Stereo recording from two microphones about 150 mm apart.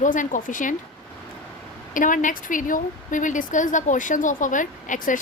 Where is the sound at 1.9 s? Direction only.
60° left (ahead or behind).